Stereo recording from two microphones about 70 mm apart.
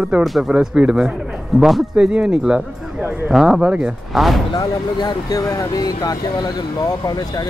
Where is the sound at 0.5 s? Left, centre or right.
Centre.